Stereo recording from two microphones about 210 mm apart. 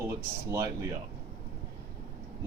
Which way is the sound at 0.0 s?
15° right (ahead or behind).